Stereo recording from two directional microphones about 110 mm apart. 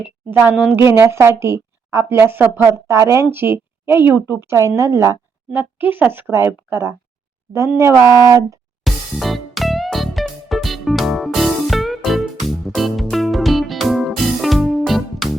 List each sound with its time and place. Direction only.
0.0 s a woman's voice: 15° right (ahead or behind)
8.0 s speech: 40° left (ahead or behind)
8.3 s a woman's voice: 30° right (ahead or behind)
8.8 s music: centre (ahead or behind)